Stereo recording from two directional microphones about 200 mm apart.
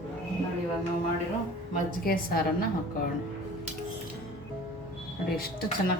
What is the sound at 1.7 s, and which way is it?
Speech, 45° left (ahead or behind).